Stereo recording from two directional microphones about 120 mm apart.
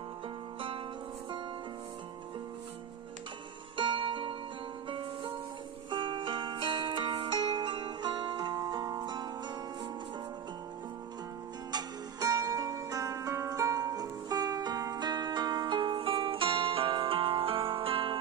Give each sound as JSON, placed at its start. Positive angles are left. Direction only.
{"t": 3.7, "sound": "music", "side_deg": -45}
{"t": 11.7, "sound": "music", "side_deg": -30}